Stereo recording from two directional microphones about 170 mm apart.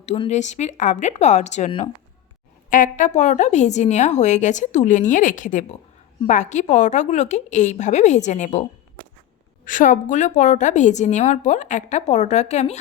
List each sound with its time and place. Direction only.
0.3 s a woman's voice: 45° left (ahead or behind)
9.6 s a woman's voice: 50° left (ahead or behind)